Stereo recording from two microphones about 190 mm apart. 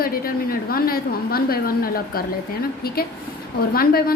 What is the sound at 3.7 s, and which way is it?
Speech, 50° left (ahead or behind).